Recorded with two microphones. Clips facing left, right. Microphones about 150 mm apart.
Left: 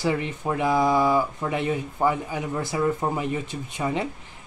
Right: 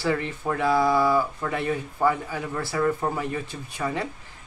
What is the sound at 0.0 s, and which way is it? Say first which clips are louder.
Speech: left 1 dB; 15° left (ahead or behind).